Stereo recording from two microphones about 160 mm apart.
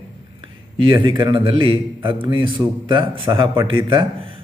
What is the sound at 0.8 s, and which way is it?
A man's voice, 30° right (ahead or behind).